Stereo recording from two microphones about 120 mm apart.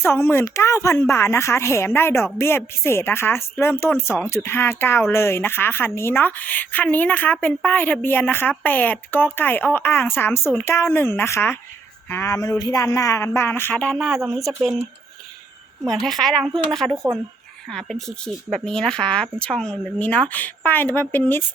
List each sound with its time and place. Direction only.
0.0 s a woman's voice: 20° left (ahead or behind); by 14.8 s centre (ahead or behind)
15.9 s a woman's voice: centre (ahead or behind)
17.7 s a woman's voice: 5° left (ahead or behind)